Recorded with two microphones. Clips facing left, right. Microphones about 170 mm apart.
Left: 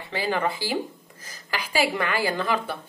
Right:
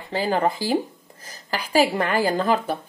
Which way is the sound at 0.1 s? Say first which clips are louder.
Right 4 dB; 35° right (ahead or behind).